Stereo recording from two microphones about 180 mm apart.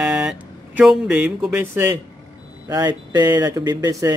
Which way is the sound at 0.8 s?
5° right (ahead or behind).